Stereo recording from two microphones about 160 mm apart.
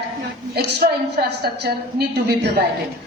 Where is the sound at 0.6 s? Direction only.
85° right.